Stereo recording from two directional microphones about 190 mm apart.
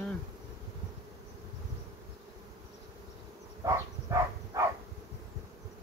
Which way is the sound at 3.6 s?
15° right (ahead or behind).